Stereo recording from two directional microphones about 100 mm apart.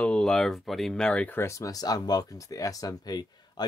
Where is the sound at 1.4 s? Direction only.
30° left (ahead or behind).